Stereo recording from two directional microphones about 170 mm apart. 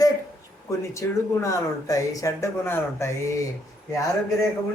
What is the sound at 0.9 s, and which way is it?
Speech, 20° left (ahead or behind).